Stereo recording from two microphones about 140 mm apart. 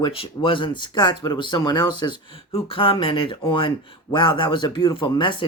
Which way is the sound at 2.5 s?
45° left (ahead or behind).